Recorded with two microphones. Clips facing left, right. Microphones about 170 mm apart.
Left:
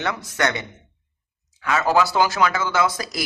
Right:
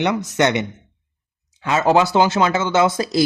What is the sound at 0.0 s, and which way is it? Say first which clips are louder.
Speech: right 6 dB; 20° right (ahead or behind).